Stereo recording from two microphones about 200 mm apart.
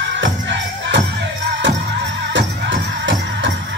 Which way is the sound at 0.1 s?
65° right (ahead or behind).